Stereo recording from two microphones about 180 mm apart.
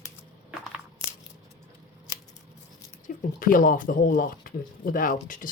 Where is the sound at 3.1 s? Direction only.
50° left (ahead or behind).